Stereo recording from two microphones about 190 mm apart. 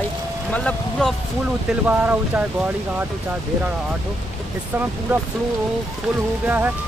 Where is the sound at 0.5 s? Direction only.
5° left (ahead or behind).